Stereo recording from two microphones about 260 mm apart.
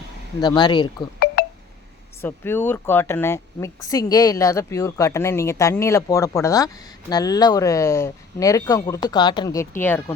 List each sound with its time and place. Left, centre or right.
0.4 s speech: centre
2.2 s speech: centre